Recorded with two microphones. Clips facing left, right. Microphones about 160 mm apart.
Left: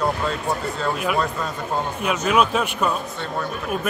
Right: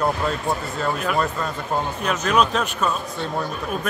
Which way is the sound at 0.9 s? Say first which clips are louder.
Right 1 dB; 5° left (ahead or behind).